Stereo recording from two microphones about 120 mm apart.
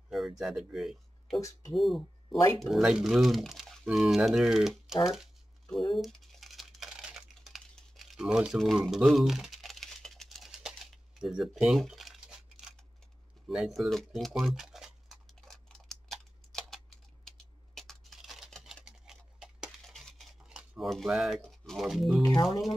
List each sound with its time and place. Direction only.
0.4 s speech: 5° right (ahead or behind)
5.0 s a sound: centre (ahead or behind)
5.9 s crumpling: centre (ahead or behind)
11.1 s speech: 5° right (ahead or behind)
11.6 s a sound: centre (ahead or behind)
21.4 s speech: centre (ahead or behind)
22.3 s speech: 40° left (ahead or behind)